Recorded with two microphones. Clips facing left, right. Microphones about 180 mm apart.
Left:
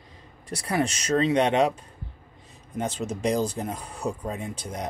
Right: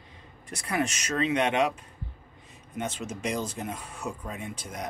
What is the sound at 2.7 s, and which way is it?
Speech, 35° left (ahead or behind).